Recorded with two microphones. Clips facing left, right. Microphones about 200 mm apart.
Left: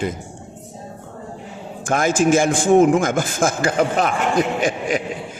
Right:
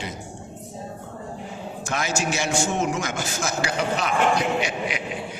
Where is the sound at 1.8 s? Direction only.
50° left (ahead or behind).